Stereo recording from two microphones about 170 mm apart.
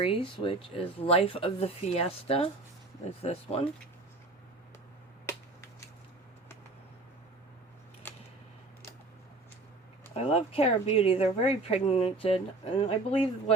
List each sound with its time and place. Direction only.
0.0 s speech: 30° left (ahead or behind)
10.2 s speech: 35° left (ahead or behind)